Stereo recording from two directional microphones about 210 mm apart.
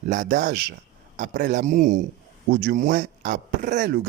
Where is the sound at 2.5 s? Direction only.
50° right (ahead or behind).